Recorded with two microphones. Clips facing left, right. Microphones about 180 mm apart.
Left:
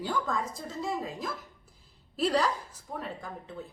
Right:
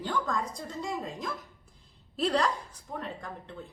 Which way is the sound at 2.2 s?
Centre (ahead or behind).